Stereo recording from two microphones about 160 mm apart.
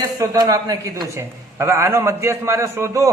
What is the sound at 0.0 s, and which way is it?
A man's voice, 25° right (ahead or behind).